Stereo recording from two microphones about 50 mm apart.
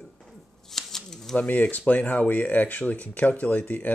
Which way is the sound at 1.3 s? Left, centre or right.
Left.